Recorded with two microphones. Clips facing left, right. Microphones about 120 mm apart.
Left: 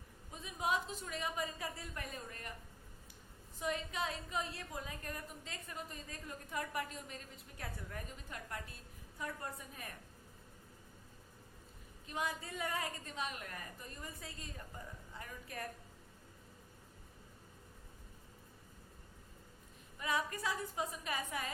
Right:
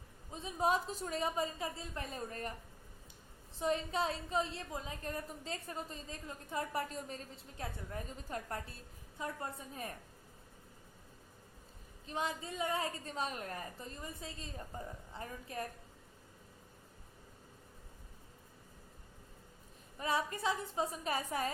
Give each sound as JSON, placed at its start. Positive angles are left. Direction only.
{"t": 0.3, "sound": "a woman's voice", "side_deg": -30}
{"t": 3.6, "sound": "a woman's voice", "side_deg": -30}
{"t": 8.3, "sound": "a woman's voice", "side_deg": -35}
{"t": 9.1, "sound": "a woman's voice", "side_deg": -25}
{"t": 12.0, "sound": "a woman's voice", "side_deg": -25}
{"t": 20.0, "sound": "a woman's voice", "side_deg": -30}